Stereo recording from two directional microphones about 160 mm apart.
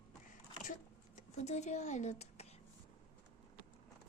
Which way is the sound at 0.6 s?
50° left (ahead or behind).